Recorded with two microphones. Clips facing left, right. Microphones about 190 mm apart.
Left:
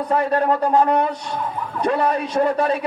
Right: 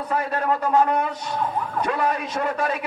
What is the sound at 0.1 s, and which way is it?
A man's voice, 35° left (ahead or behind).